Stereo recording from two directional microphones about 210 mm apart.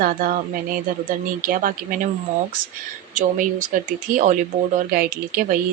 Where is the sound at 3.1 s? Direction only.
40° right (ahead or behind).